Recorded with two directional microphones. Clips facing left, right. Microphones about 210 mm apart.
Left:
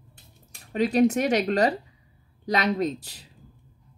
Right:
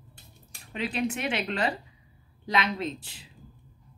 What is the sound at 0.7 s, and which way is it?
Speech, 40° left (ahead or behind).